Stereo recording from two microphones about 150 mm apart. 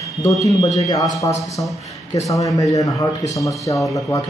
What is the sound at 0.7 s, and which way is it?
Speech, 25° left (ahead or behind).